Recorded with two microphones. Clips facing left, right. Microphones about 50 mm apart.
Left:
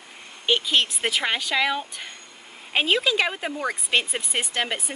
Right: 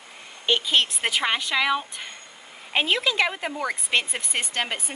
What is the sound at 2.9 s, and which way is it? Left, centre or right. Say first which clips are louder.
Speech: left 1 dB; centre.